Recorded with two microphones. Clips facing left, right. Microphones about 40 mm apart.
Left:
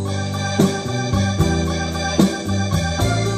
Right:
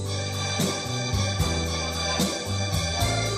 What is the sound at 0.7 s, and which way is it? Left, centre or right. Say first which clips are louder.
Organ: left 7 dB; left.